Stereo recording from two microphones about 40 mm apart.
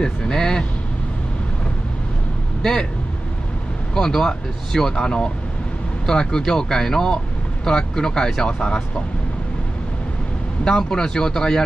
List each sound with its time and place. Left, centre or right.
0.0 s speech: centre
2.6 s speech: centre
3.9 s speech: centre
10.6 s speech: centre